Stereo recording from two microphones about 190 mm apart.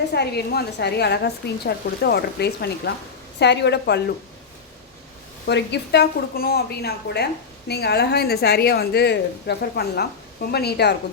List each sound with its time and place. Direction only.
0.1 s a woman's voice: 60° left (ahead or behind)
5.5 s a woman's voice: 65° left (ahead or behind)